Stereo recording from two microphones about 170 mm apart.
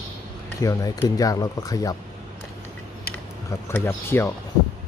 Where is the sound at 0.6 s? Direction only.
20° left (ahead or behind).